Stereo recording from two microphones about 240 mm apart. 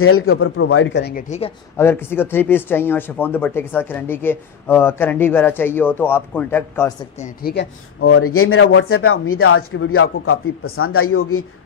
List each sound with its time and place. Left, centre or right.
0.0 s speech: left
1.1 s speech: left
1.8 s speech: centre
7.2 s a woman's voice: left
8.0 s speech: left